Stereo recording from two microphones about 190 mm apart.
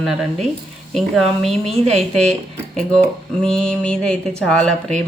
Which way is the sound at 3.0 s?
5° left (ahead or behind).